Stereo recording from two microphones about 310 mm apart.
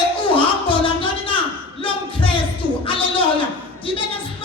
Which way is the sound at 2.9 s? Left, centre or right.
Centre.